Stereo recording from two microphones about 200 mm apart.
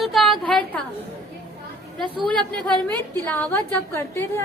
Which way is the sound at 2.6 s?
10° left (ahead or behind).